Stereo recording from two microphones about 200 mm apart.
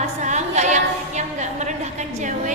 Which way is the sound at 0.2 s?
35° right (ahead or behind).